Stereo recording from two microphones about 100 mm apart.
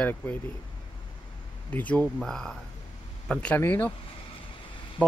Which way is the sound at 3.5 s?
20° left (ahead or behind).